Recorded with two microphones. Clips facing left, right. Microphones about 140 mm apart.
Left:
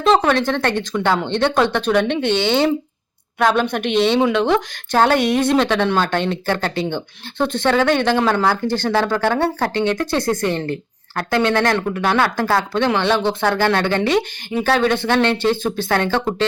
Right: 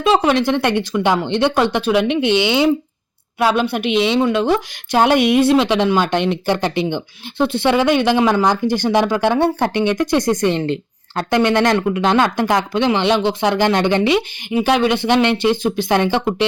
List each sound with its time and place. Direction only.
0.0 s speech: 10° right (ahead or behind)